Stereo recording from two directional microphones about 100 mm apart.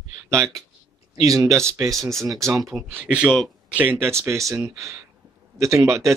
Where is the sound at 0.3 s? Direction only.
30° right (ahead or behind).